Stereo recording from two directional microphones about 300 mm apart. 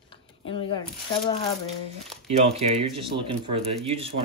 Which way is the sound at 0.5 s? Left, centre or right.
Centre.